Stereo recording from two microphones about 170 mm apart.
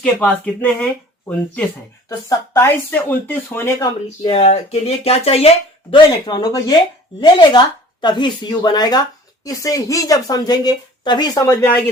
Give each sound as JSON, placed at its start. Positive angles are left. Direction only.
{"t": 0.0, "sound": "speech", "side_deg": 10}
{"t": 2.0, "sound": "speech", "side_deg": 15}
{"t": 4.2, "sound": "speech", "side_deg": 35}